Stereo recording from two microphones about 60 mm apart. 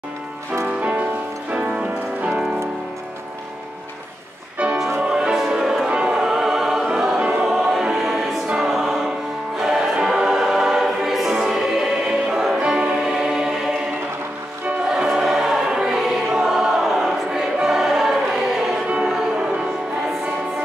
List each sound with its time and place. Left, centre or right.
0.7 s music: right
5.2 s music: centre
8.5 s choir: centre
14.9 s choir: centre